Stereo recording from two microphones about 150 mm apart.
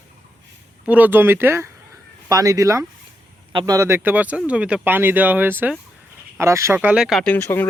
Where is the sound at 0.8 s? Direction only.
10° right (ahead or behind).